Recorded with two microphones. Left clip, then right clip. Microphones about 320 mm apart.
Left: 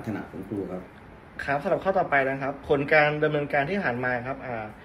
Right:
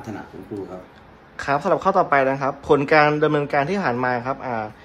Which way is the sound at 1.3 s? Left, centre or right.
Right.